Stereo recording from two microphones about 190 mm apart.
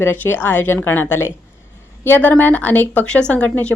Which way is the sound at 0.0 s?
10° left (ahead or behind).